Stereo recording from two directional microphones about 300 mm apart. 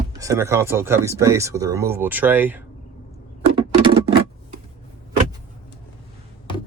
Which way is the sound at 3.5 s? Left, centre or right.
Centre.